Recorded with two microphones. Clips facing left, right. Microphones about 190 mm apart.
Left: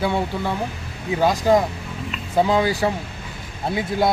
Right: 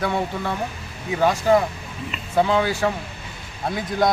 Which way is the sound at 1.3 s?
35° left (ahead or behind).